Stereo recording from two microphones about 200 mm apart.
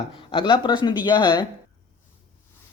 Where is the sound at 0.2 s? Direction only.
25° left (ahead or behind).